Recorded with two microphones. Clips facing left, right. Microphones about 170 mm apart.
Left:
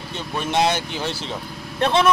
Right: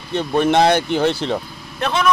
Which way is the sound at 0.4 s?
60° right (ahead or behind).